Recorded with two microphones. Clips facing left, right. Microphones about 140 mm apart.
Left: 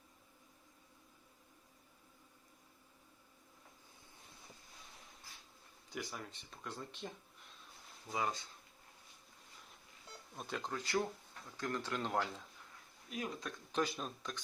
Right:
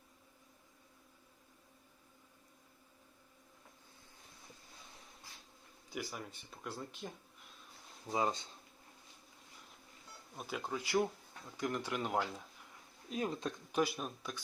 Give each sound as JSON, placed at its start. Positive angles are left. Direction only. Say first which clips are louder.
{"t": 5.9, "sound": "speech", "louder": "right 2 dB", "side_deg": -10}
{"t": 8.1, "sound": "speech", "louder": "right 4 dB", "side_deg": -25}
{"t": 10.3, "sound": "speech", "louder": "right 2 dB", "side_deg": -5}
{"t": 13.1, "sound": "speech", "louder": "right 5 dB", "side_deg": -30}
{"t": 13.5, "sound": "speech", "louder": "right 3 dB", "side_deg": -10}